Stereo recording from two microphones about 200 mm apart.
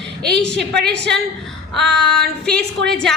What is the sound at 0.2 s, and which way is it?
A woman's voice, 5° left (ahead or behind).